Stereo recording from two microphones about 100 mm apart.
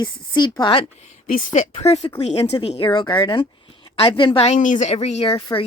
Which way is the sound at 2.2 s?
90° left.